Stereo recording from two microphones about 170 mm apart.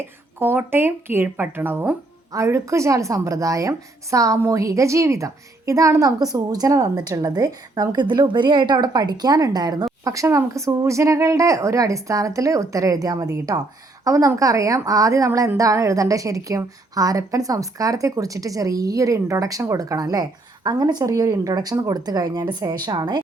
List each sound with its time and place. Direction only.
0.0 s speech: 15° right (ahead or behind)